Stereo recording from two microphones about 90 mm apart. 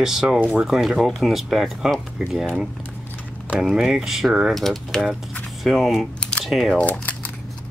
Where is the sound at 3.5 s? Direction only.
5° right (ahead or behind).